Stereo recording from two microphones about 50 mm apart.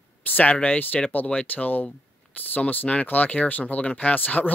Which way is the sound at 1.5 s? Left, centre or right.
Left.